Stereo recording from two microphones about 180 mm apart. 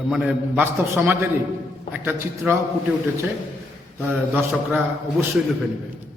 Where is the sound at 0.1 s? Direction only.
5° right (ahead or behind).